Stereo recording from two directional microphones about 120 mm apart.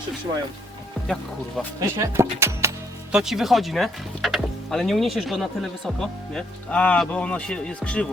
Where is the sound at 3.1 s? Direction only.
5° right (ahead or behind).